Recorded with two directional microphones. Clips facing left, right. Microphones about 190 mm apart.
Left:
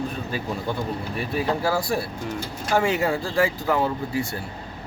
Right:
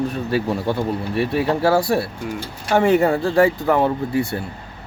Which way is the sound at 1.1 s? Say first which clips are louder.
Right 6 dB; 65° right (ahead or behind).